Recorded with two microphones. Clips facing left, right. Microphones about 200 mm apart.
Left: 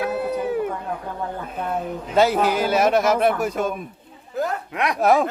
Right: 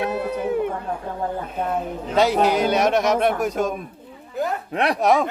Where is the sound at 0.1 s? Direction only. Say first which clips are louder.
Even; 5° left (ahead or behind).